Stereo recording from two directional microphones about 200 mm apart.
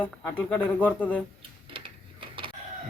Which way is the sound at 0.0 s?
10° left (ahead or behind).